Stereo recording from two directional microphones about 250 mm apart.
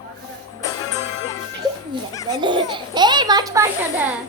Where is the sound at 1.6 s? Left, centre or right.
Centre.